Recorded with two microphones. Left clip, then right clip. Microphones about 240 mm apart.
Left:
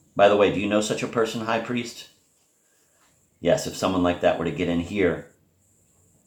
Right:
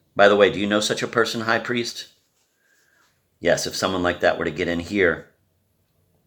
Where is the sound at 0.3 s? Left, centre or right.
Right.